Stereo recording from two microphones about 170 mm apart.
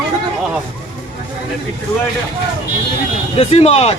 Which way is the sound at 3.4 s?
35° left (ahead or behind).